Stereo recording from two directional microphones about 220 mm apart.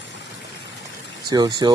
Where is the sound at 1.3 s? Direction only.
20° right (ahead or behind).